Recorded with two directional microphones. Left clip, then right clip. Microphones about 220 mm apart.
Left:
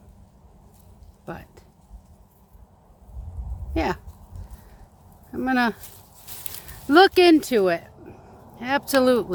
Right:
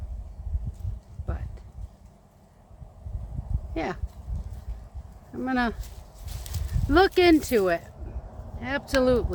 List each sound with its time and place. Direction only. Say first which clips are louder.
1.3 s a sound: left 5 dB; 50° left (ahead or behind)
3.8 s speech: left 6 dB; 50° left (ahead or behind)
5.3 s speech: left 5 dB; 55° left (ahead or behind)
6.9 s speech: left 5 dB; 40° left (ahead or behind)
8.5 s speech: left 4 dB; 50° left (ahead or behind)